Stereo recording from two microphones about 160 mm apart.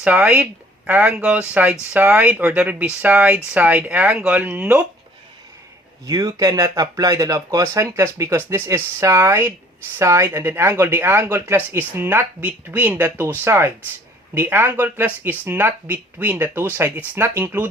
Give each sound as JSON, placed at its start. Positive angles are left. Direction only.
{"t": 0.0, "sound": "speech", "side_deg": -10}
{"t": 6.1, "sound": "speech", "side_deg": -20}